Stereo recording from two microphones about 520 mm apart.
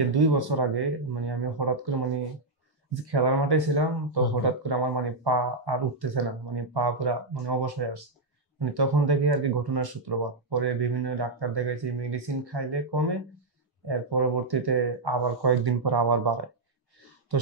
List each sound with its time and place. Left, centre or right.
0.1 s speech: right